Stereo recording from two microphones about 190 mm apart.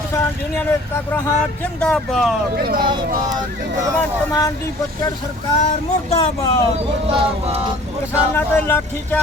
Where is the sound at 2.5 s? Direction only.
50° right (ahead or behind).